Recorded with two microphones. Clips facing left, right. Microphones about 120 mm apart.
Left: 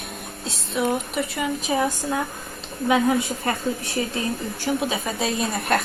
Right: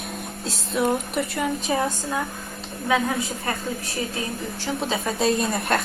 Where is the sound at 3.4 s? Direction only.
25° left (ahead or behind).